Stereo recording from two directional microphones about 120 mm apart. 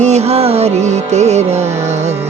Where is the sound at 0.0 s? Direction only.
65° right (ahead or behind).